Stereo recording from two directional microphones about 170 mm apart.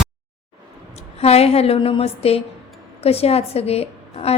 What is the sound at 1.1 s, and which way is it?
A woman's voice, 35° left (ahead or behind).